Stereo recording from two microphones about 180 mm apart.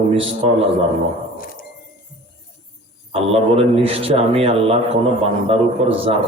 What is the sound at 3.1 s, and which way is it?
A man's voice, 30° right (ahead or behind).